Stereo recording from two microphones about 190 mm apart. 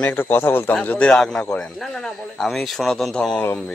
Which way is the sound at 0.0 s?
10° left (ahead or behind).